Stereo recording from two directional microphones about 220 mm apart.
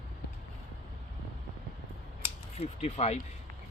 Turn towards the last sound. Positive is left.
turn(degrees=30)  # may be behind; listen again after turning